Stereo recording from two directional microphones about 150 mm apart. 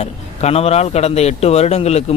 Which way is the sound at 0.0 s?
45° left (ahead or behind).